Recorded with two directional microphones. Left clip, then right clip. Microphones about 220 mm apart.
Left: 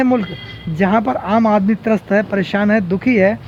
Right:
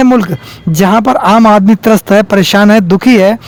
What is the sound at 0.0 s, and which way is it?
Speech, 45° right (ahead or behind).